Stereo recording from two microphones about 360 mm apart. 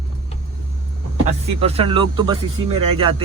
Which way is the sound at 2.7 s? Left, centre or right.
Right.